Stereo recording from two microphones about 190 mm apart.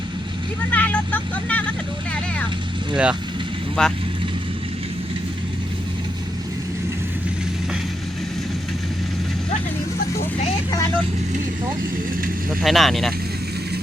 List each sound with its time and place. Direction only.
0.7 s speech: 10° left (ahead or behind)
2.9 s speech: 5° right (ahead or behind)
12.6 s speech: centre (ahead or behind)